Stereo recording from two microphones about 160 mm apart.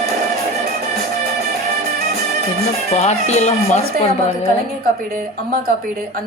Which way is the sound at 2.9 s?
45° left (ahead or behind).